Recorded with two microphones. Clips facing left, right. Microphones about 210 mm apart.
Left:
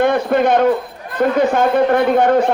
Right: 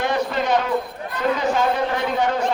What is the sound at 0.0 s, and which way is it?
A man's voice, 55° left (ahead or behind).